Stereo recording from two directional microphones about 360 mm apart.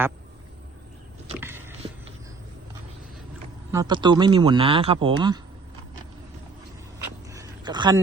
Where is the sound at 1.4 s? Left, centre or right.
Centre.